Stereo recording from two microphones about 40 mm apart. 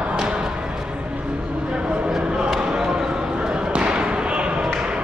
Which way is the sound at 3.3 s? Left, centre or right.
Right.